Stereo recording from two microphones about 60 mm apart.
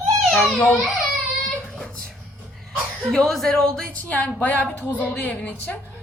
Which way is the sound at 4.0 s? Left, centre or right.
Left.